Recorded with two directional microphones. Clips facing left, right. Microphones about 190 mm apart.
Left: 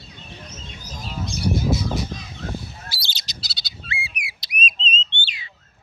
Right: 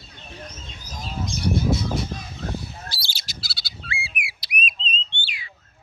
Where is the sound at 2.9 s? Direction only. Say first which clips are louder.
Even; 20° left (ahead or behind).